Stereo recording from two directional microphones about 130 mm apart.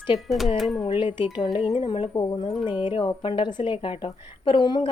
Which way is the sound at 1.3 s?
40° left (ahead or behind).